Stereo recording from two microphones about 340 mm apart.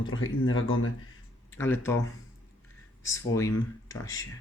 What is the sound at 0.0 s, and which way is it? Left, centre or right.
Speech, left.